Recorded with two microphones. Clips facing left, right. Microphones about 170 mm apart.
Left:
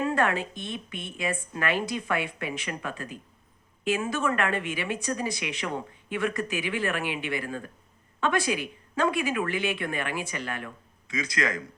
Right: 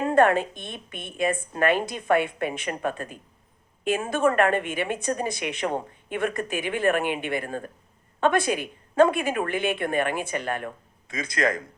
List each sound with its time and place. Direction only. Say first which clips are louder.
0.1 s speech: right 7 dB; 50° right (ahead or behind)